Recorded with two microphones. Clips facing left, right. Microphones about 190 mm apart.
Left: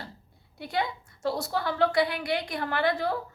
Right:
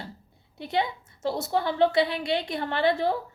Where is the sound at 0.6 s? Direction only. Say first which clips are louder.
Right 3 dB; 25° right (ahead or behind).